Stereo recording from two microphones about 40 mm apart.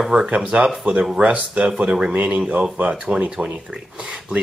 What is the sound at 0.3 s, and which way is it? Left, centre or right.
Speech, right.